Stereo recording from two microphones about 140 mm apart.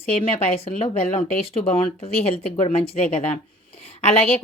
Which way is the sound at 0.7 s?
65° left (ahead or behind).